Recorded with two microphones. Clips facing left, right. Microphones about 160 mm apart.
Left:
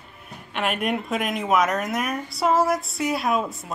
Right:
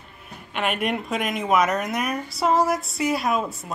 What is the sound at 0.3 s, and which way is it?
Speech, centre (ahead or behind).